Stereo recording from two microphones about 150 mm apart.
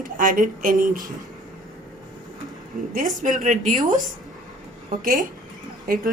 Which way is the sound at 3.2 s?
60° right (ahead or behind).